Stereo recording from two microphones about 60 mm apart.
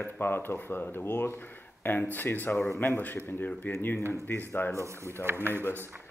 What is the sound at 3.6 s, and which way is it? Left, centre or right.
Speech, left.